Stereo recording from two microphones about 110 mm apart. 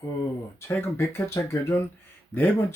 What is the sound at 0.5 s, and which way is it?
Speech, 20° left (ahead or behind).